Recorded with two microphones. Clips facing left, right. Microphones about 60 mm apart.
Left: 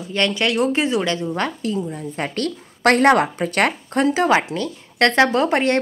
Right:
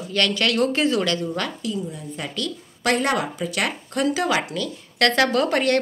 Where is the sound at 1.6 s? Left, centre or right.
Left.